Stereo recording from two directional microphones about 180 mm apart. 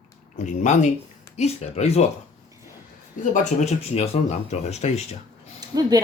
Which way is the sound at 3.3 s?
40° left (ahead or behind).